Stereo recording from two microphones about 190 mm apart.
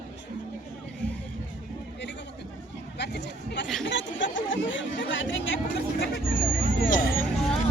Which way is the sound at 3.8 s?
75° left (ahead or behind).